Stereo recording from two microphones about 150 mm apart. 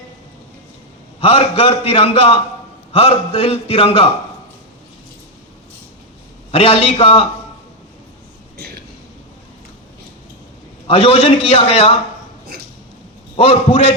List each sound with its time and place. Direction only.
1.2 s a man's voice: 35° left (ahead or behind)
6.5 s a man's voice: 40° left (ahead or behind)
10.8 s a man's voice: 35° left (ahead or behind)
13.3 s a man's voice: 35° left (ahead or behind)